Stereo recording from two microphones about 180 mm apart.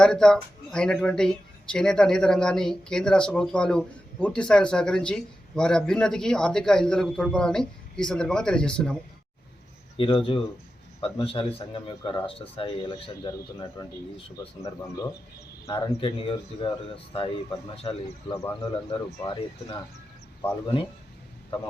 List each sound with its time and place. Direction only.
0.0 s speech: 5° left (ahead or behind)
10.0 s speech: 30° left (ahead or behind)
15.6 s speech: 30° left (ahead or behind)